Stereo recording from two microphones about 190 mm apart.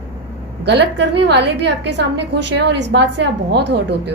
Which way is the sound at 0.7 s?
60° right (ahead or behind).